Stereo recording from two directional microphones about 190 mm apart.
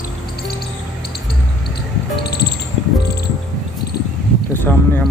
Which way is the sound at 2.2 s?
60° left (ahead or behind).